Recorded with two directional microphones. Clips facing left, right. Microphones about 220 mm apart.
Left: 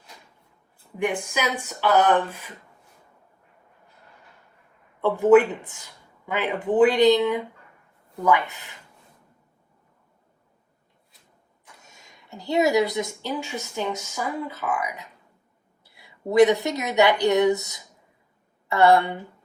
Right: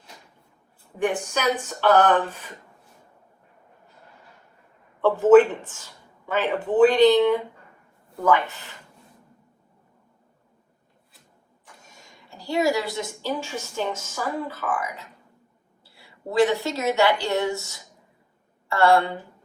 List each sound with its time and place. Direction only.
0.9 s speech: 10° left (ahead or behind)
5.0 s speech: 15° left (ahead or behind)
8.2 s speech: 15° left (ahead or behind)
11.9 s a woman's voice: 20° left (ahead or behind)